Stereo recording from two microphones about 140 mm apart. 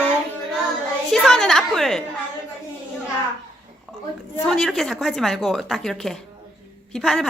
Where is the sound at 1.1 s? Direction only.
Centre (ahead or behind).